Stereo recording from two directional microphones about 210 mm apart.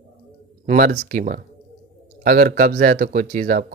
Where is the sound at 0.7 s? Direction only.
40° right (ahead or behind).